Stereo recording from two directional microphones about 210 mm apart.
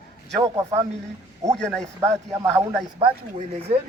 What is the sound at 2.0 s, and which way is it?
Speech, 15° right (ahead or behind).